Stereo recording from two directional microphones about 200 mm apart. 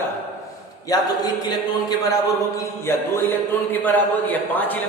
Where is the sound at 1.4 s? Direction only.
20° left (ahead or behind).